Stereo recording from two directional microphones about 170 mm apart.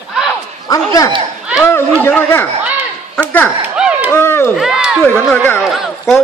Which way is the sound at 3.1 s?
10° left (ahead or behind).